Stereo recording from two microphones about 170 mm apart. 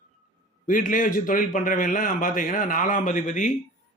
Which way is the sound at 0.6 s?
50° left (ahead or behind).